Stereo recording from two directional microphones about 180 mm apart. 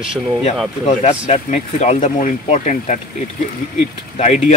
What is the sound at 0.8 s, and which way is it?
Speech, 40° left (ahead or behind).